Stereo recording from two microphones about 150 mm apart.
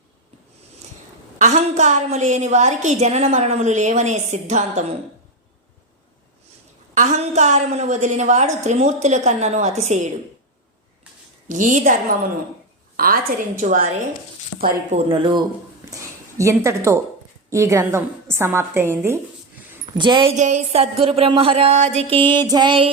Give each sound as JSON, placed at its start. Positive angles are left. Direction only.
{"t": 1.4, "sound": "a woman's voice", "side_deg": -50}
{"t": 6.9, "sound": "a woman's voice", "side_deg": -55}
{"t": 11.4, "sound": "a woman's voice", "side_deg": -55}
{"t": 13.0, "sound": "a woman's voice", "side_deg": -75}
{"t": 15.1, "sound": "speech", "side_deg": -35}
{"t": 16.4, "sound": "a woman's voice", "side_deg": -20}
{"t": 20.0, "sound": "speech", "side_deg": -30}
{"t": 20.3, "sound": "speech", "side_deg": -50}
{"t": 22.2, "sound": "speech", "side_deg": -30}